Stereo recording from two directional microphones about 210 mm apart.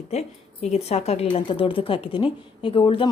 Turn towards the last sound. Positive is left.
turn(degrees=25)  # may be behind; listen again after turning